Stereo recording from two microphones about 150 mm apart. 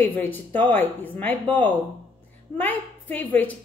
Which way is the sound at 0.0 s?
15° left (ahead or behind).